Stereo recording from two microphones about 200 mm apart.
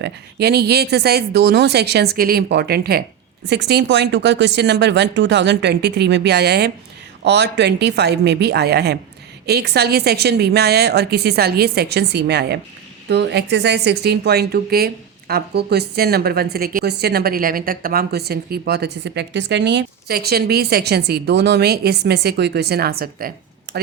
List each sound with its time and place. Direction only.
0.0 s a woman's voice: 55° right (ahead or behind)